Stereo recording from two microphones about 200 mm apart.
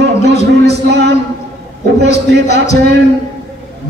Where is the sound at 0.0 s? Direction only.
55° right (ahead or behind).